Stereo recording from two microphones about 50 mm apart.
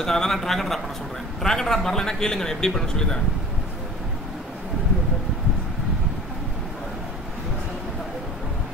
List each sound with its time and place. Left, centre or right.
0.0 s a man's voice: centre